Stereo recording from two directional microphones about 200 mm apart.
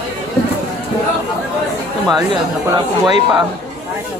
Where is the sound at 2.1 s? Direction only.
20° right (ahead or behind).